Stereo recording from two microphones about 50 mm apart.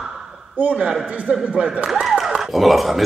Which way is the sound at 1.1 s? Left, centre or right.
Right.